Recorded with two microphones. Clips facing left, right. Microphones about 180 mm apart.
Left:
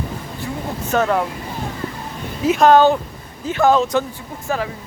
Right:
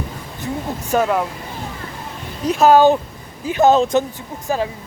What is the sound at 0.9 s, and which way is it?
Speech, 10° right (ahead or behind).